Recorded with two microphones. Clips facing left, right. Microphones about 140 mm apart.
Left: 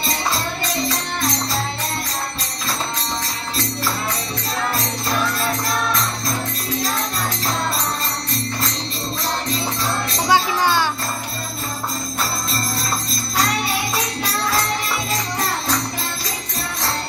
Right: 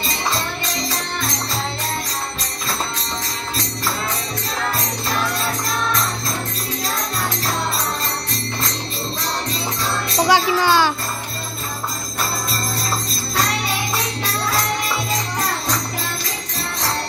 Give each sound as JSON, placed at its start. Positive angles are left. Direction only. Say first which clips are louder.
{"t": 10.3, "sound": "music", "louder": "right 1 dB", "side_deg": -90}